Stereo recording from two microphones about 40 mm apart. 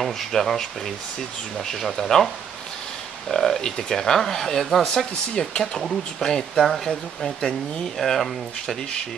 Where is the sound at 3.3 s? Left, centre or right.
Centre.